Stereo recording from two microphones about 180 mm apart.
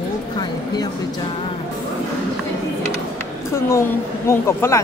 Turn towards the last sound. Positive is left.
turn(degrees=15)  # may be behind; listen again after turning